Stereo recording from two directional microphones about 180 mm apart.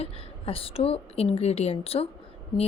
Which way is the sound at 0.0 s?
30° left (ahead or behind).